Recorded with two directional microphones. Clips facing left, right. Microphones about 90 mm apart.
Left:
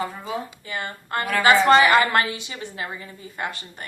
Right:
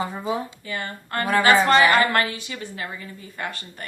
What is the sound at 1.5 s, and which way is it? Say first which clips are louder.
A woman's voice: left 2 dB; 25° left (ahead or behind).